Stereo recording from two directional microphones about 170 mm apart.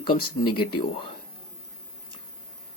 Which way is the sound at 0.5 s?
30° left (ahead or behind).